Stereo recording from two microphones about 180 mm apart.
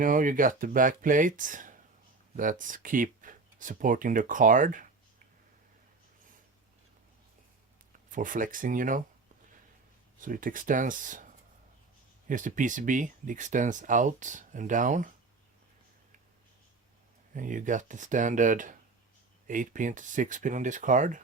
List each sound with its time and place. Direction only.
0.0 s speech: 50° right (ahead or behind)
8.1 s speech: 45° right (ahead or behind)
10.2 s speech: 50° right (ahead or behind)
12.3 s speech: 45° right (ahead or behind)
17.3 s speech: 45° right (ahead or behind)